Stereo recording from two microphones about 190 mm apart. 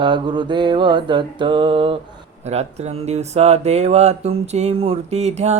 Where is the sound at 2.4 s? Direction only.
35° right (ahead or behind).